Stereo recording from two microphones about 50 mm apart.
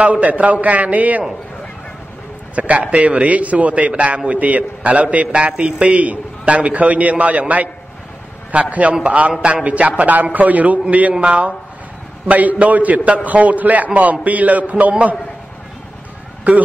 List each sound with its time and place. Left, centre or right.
0.0 s a man's voice: right
2.5 s a man's voice: right